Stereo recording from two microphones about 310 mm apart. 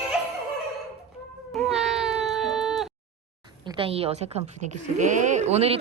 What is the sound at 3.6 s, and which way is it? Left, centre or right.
A woman's voice, centre.